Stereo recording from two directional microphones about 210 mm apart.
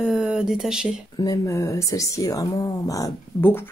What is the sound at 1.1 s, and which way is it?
Speech, 15° left (ahead or behind).